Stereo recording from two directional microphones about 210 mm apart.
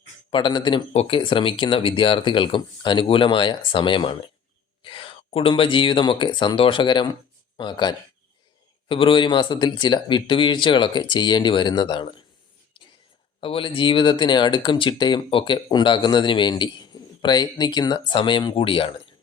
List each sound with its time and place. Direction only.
0.3 s speech: 20° left (ahead or behind)
13.4 s speech: 25° left (ahead or behind)